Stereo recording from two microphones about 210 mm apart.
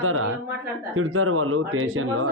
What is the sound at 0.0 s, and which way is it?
Speech, 90° right.